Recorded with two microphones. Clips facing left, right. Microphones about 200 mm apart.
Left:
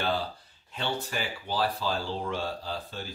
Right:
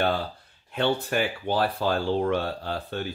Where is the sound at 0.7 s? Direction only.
60° right (ahead or behind).